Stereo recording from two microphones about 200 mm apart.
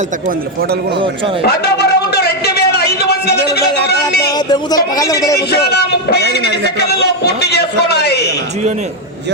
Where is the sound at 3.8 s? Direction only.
55° left (ahead or behind).